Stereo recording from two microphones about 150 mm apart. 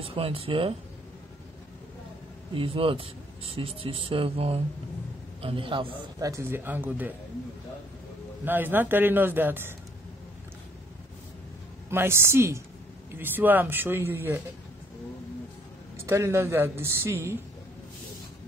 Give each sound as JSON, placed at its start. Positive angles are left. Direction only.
{"t": 0.0, "sound": "speech", "side_deg": -40}
{"t": 2.5, "sound": "speech", "side_deg": -40}
{"t": 6.1, "sound": "speech", "side_deg": -20}
{"t": 8.5, "sound": "speech", "side_deg": -15}
{"t": 11.9, "sound": "speech", "side_deg": -15}
{"t": 16.0, "sound": "speech", "side_deg": -20}